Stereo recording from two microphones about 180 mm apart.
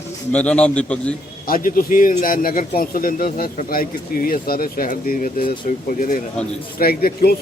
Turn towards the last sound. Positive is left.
turn(degrees=60)  # may be behind; listen again after turning